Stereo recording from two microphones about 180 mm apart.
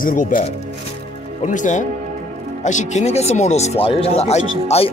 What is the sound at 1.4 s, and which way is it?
Speech, 45° left (ahead or behind).